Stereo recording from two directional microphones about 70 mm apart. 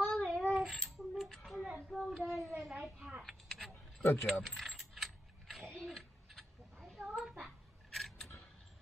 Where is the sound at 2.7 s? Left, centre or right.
Centre.